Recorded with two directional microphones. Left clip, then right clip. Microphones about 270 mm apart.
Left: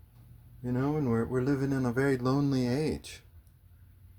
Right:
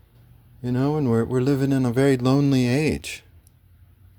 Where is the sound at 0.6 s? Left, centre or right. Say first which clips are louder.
Right 7 dB; right.